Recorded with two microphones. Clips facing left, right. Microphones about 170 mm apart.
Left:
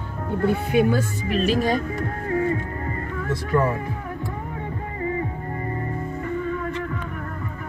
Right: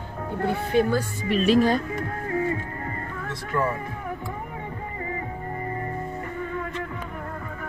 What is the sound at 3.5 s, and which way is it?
Speech, 35° left (ahead or behind).